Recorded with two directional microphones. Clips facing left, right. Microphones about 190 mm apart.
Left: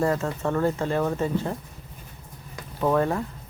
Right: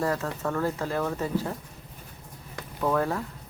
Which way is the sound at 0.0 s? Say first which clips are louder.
Left 4 dB; 10° left (ahead or behind).